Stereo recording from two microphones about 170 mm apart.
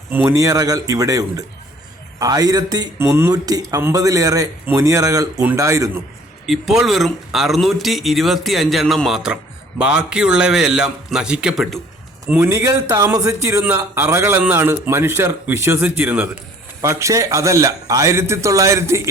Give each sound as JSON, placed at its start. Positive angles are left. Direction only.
{"t": 0.1, "sound": "a man's voice", "side_deg": -15}
{"t": 6.4, "sound": "speech", "side_deg": 0}
{"t": 12.3, "sound": "a man's voice", "side_deg": -15}